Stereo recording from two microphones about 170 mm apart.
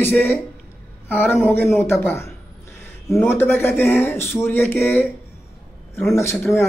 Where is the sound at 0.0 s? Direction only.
10° left (ahead or behind).